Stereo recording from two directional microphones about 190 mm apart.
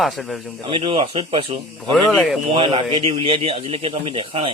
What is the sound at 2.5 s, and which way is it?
A man's voice, 30° right (ahead or behind).